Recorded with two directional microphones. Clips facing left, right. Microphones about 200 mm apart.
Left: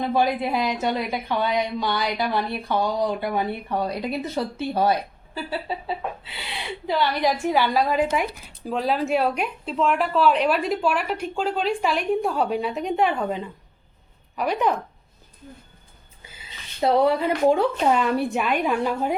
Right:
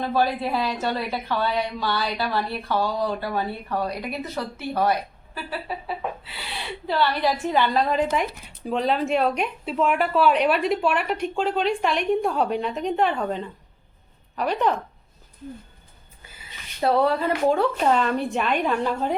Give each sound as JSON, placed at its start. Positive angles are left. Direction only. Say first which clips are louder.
{"t": 0.0, "sound": "a woman's voice", "louder": "left 1 dB", "side_deg": 15}
{"t": 16.8, "sound": "a woman's voice", "louder": "left 1 dB", "side_deg": 15}